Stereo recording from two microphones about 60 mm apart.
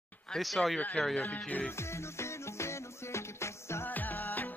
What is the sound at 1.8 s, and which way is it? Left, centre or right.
Music, left.